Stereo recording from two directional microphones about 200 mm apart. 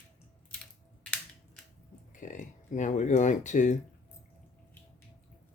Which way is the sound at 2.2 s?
40° left (ahead or behind).